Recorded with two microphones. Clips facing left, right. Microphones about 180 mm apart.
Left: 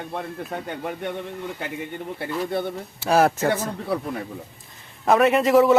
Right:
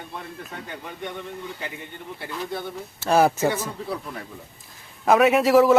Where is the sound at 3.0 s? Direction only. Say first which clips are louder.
Even; centre (ahead or behind).